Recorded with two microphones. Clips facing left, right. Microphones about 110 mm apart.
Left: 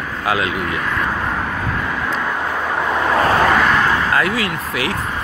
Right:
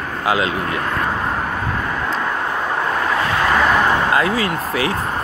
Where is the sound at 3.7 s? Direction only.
25° right (ahead or behind).